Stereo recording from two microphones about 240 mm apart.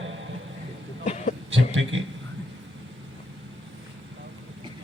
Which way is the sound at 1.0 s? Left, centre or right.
Left.